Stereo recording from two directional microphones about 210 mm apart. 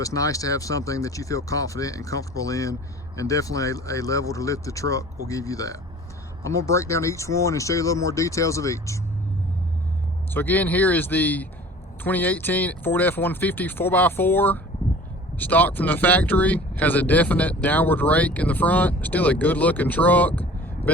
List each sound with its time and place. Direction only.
0.0 s speech: 15° left (ahead or behind)
10.3 s speech: 10° left (ahead or behind)